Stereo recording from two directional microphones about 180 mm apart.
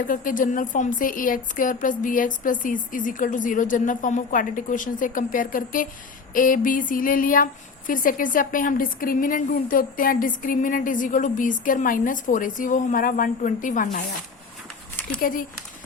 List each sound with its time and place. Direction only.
0.0 s speech: 50° left (ahead or behind)
15.2 s speech: 50° left (ahead or behind)